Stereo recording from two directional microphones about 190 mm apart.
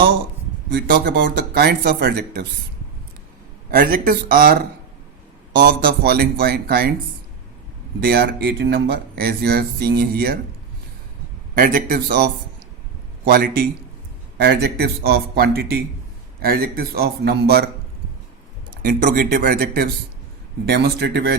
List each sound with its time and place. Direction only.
0.7 s speech: 55° right (ahead or behind)
3.7 s a man's voice: 50° right (ahead or behind)
6.0 s a man's voice: 55° right (ahead or behind)
8.0 s speech: 55° right (ahead or behind)
11.5 s a man's voice: 50° right (ahead or behind)
18.8 s a man's voice: 45° right (ahead or behind)